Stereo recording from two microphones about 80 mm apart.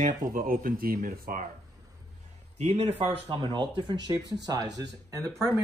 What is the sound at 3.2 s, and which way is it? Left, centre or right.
Speech, right.